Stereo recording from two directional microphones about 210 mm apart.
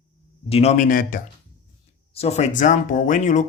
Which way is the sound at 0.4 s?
30° left (ahead or behind).